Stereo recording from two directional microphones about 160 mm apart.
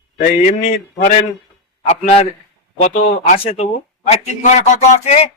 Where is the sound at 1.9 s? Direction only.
40° left (ahead or behind).